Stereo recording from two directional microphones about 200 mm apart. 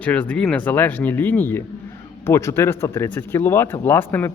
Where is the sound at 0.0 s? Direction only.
5° left (ahead or behind).